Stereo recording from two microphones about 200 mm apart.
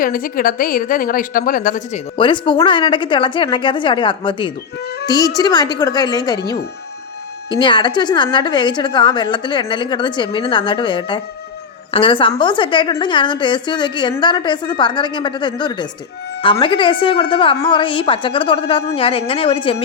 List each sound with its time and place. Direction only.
0.0 s a woman's voice: 45° left (ahead or behind)
2.1 s a woman's voice: 25° left (ahead or behind)
7.6 s a woman's voice: 25° left (ahead or behind)